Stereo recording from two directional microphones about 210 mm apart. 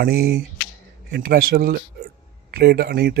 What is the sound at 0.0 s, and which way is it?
Speech, 50° right (ahead or behind).